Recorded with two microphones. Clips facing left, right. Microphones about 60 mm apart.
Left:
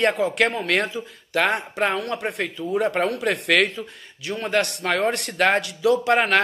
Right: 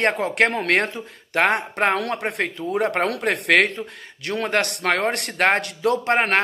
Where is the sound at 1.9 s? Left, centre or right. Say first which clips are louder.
Right 2 dB; right.